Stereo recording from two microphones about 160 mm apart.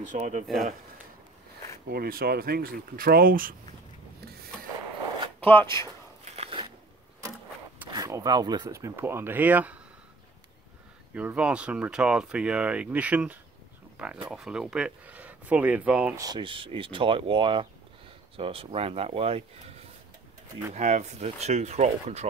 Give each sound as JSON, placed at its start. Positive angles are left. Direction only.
{"t": 0.1, "sound": "speech", "side_deg": -50}
{"t": 1.9, "sound": "speech", "side_deg": -70}
{"t": 5.4, "sound": "speech", "side_deg": 10}
{"t": 6.3, "sound": "biting", "side_deg": -35}
{"t": 7.9, "sound": "speech", "side_deg": -20}
{"t": 11.1, "sound": "speech", "side_deg": -5}
{"t": 16.2, "sound": "speech", "side_deg": -25}
{"t": 20.7, "sound": "speech", "side_deg": -45}